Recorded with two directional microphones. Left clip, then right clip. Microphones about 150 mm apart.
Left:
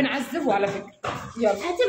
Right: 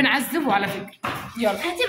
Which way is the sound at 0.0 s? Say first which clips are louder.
Right 4 dB; 10° left (ahead or behind).